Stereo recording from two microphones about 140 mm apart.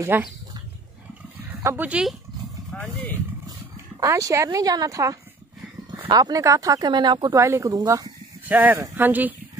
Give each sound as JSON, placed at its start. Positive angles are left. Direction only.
{"t": 0.1, "sound": "speech", "side_deg": -15}
{"t": 1.6, "sound": "speech", "side_deg": -15}
{"t": 2.7, "sound": "speech", "side_deg": 5}
{"t": 3.4, "sound": "speech", "side_deg": -20}
{"t": 7.3, "sound": "speech", "side_deg": -20}
{"t": 8.5, "sound": "speech", "side_deg": -15}